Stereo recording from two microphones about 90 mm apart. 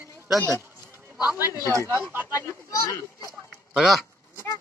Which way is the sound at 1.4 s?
40° left (ahead or behind).